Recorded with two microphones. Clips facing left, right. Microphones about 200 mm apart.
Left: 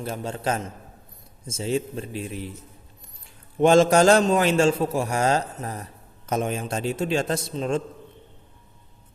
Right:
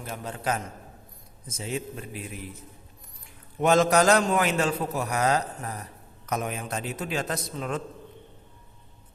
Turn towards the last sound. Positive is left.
turn(degrees=25)  # may be behind; listen again after turning